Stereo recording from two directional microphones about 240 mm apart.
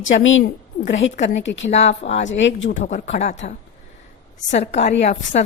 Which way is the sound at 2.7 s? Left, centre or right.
Left.